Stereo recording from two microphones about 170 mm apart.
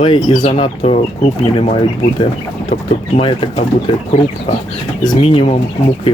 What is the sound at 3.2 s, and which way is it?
Speech, 30° left (ahead or behind).